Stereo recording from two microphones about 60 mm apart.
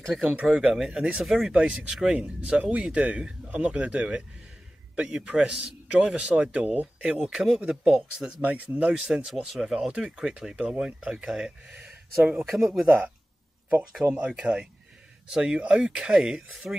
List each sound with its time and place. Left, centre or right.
0.3 s speech: right
7.2 s speech: centre
8.4 s speech: right
8.9 s speech: centre
11.8 s a sound: right
12.4 s speech: centre
12.8 s speech: centre
14.0 s speech: right
14.3 s speech: centre